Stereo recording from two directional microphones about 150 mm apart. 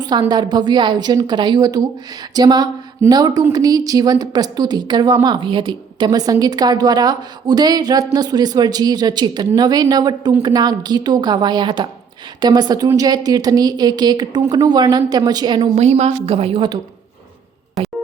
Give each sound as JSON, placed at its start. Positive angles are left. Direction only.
{"t": 0.0, "sound": "a woman's voice", "side_deg": -30}
{"t": 15.7, "sound": "a woman's voice", "side_deg": -45}